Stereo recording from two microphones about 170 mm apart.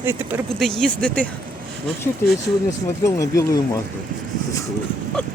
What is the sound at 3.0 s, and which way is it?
Speech, 20° left (ahead or behind).